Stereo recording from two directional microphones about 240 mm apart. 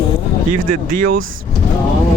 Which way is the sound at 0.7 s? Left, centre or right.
Right.